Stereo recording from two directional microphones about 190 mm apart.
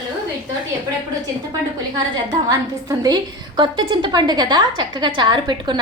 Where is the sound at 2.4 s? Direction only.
20° right (ahead or behind).